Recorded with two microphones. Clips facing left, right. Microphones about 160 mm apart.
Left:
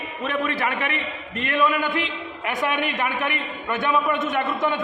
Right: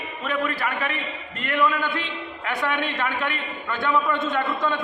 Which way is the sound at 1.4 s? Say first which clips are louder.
Left 1 dB; 20° left (ahead or behind).